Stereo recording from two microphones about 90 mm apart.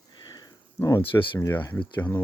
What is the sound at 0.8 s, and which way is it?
Speech, 30° left (ahead or behind).